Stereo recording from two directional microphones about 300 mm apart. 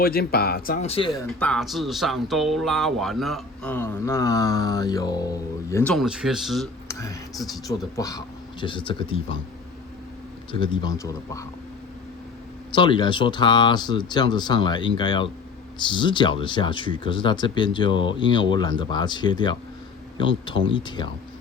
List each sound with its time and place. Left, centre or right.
0.0 s speech: left; by 7.6 s centre
7.9 s speech: centre
10.5 s speech: centre
12.7 s speech: centre